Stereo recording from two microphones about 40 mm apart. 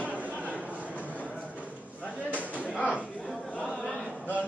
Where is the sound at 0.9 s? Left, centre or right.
Left.